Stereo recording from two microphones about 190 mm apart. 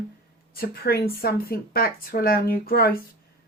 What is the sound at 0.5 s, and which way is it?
Speech, 50° left (ahead or behind).